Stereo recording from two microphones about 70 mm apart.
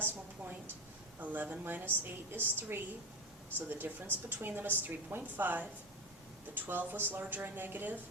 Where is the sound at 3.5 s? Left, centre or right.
Right.